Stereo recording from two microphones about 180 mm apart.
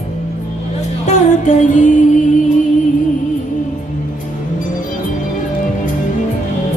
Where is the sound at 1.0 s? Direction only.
45° left (ahead or behind).